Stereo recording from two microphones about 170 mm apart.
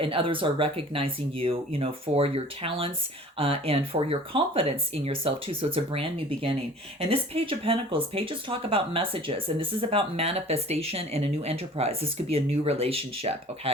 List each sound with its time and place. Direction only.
0.0 s speech: 30° right (ahead or behind)